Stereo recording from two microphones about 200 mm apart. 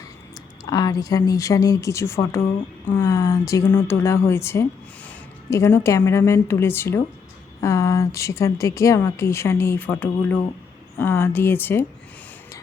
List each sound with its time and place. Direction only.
0.6 s a woman's voice: 20° left (ahead or behind)